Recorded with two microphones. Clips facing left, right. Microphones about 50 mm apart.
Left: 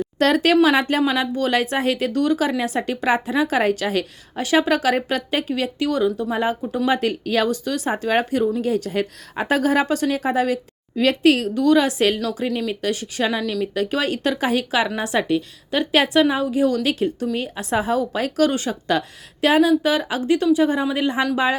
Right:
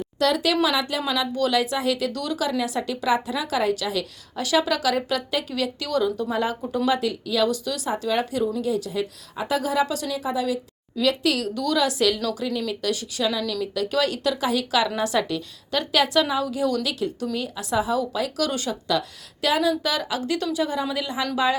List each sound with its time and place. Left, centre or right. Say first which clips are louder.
0.2 s speech: left 5 dB; left; by 6.4 s centre
6.8 s a woman's voice: left 3 dB; left